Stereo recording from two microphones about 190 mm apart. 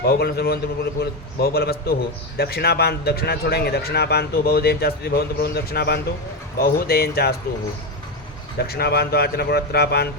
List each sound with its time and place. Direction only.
0.0 s speech: 55° left (ahead or behind)
8.5 s speech: 55° left (ahead or behind)